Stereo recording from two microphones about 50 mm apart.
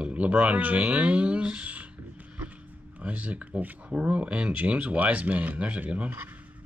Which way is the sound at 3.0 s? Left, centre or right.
Right.